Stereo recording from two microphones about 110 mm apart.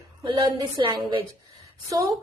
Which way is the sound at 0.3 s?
45° right (ahead or behind).